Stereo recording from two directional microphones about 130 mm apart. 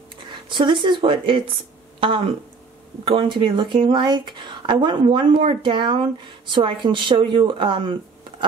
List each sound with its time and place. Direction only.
0.3 s a woman's voice: 40° right (ahead or behind)